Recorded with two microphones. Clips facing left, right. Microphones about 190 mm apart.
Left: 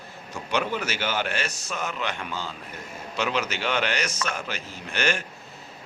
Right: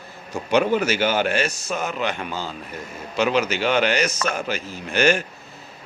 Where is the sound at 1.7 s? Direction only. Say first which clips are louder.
Right 5 dB; 45° right (ahead or behind).